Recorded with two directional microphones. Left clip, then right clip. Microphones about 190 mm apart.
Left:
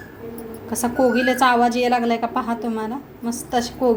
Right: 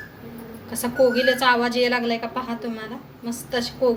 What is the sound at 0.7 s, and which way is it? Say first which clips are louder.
A woman's voice: even; 35° left (ahead or behind).